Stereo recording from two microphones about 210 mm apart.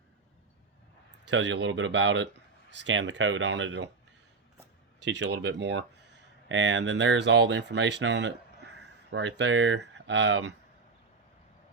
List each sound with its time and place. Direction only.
1.2 s speech: 60° right (ahead or behind)
4.9 s speech: 55° right (ahead or behind)